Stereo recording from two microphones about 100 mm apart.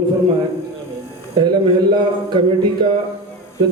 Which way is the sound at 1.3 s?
50° right (ahead or behind).